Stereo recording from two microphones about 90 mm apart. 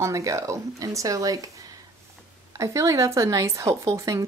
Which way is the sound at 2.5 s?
35° right (ahead or behind).